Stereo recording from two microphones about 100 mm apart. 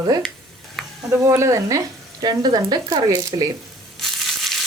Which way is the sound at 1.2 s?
30° right (ahead or behind).